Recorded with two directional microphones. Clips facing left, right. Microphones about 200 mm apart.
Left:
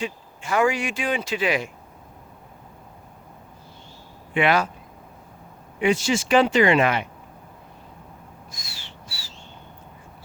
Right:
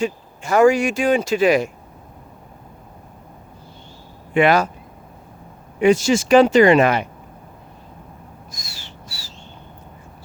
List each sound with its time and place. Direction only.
0.0 s speech: 45° right (ahead or behind)
4.4 s speech: 40° right (ahead or behind)
5.8 s speech: 40° right (ahead or behind)
8.5 s a sound: 40° right (ahead or behind)